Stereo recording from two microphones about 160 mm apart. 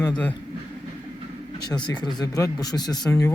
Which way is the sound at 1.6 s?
25° left (ahead or behind).